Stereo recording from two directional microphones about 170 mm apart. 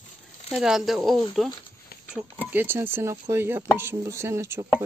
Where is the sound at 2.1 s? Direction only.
10° right (ahead or behind).